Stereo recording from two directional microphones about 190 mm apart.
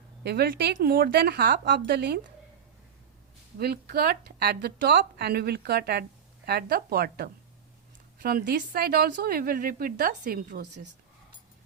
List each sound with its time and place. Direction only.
0.2 s a woman's voice: 60° right (ahead or behind)
3.6 s a woman's voice: 55° right (ahead or behind)